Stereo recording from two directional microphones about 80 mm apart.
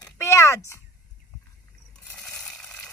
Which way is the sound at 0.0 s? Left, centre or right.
Left.